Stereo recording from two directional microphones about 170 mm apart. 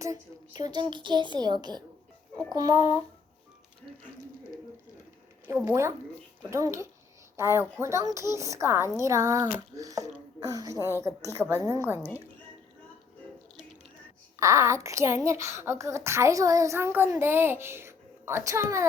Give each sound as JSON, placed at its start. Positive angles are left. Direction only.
{"t": 0.0, "sound": "speech", "side_deg": -20}
{"t": 5.5, "sound": "a woman's voice", "side_deg": -15}
{"t": 14.3, "sound": "a woman's voice", "side_deg": -15}